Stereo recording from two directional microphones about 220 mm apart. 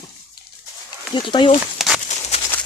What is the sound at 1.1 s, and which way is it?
Speech, 20° left (ahead or behind).